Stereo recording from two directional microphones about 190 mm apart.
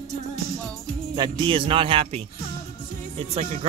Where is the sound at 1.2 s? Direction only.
25° right (ahead or behind).